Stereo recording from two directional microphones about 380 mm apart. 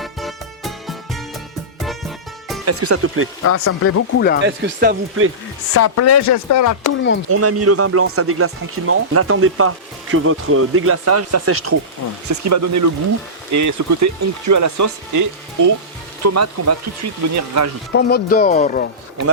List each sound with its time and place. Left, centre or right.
0.0 s music: centre
2.6 s speech: right
3.4 s speech: left
4.4 s speech: right
5.7 s speech: left
7.3 s speech: right
17.9 s speech: left